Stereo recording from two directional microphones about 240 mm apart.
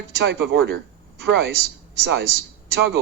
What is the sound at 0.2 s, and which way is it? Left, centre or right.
A man's voice, right.